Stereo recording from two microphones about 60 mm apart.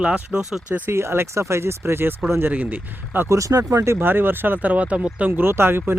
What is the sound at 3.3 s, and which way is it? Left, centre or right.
Speech, right.